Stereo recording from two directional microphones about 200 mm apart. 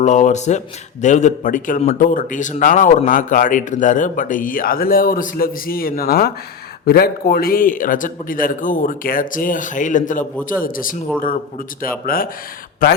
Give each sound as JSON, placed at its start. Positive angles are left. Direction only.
{"t": 0.0, "sound": "a man's voice", "side_deg": 35}